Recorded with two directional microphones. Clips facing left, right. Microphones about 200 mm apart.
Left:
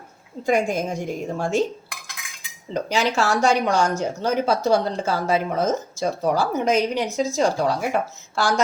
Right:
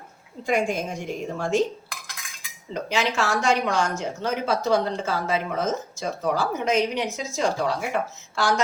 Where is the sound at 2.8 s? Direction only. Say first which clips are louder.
Left 3 dB; 40° left (ahead or behind).